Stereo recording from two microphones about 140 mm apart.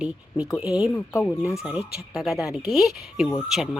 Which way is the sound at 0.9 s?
15° left (ahead or behind).